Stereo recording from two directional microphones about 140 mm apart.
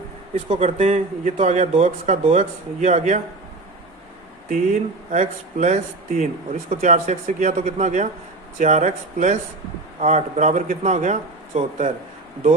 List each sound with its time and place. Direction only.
0.6 s speech: 45° right (ahead or behind)
1.2 s speech: 55° right (ahead or behind)
4.4 s speech: 65° right (ahead or behind)